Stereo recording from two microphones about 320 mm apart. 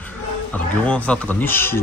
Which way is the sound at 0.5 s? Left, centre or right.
Centre.